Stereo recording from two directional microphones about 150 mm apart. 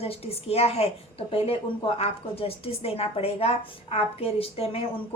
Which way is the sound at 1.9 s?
40° left (ahead or behind).